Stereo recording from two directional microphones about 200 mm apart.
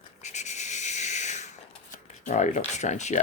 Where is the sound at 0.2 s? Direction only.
35° left (ahead or behind).